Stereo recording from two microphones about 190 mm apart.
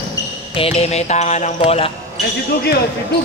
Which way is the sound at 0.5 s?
30° left (ahead or behind).